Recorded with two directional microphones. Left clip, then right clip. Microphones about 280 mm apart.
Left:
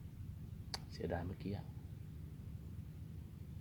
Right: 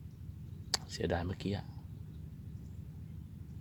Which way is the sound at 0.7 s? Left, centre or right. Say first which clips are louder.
Right 8 dB; right.